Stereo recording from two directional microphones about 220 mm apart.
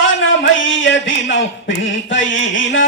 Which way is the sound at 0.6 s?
60° left (ahead or behind).